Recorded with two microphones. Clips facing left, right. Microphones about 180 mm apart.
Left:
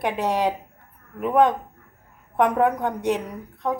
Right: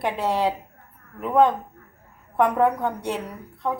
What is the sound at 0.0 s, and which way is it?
A woman's voice, 15° left (ahead or behind).